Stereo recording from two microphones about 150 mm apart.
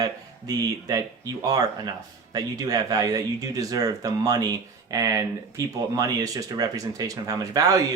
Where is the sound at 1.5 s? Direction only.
25° right (ahead or behind).